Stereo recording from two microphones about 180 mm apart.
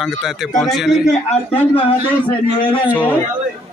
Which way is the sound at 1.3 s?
30° left (ahead or behind).